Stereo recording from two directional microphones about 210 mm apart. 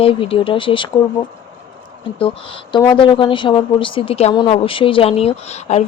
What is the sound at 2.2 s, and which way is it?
Speech, 25° left (ahead or behind).